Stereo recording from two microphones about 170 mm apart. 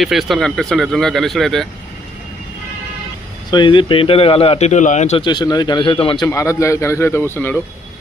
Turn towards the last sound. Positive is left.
turn(degrees=10)  # may be behind; listen again after turning